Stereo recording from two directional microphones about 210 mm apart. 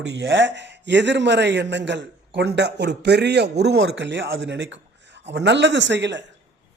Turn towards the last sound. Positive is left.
turn(degrees=-55)  # may be behind; listen again after turning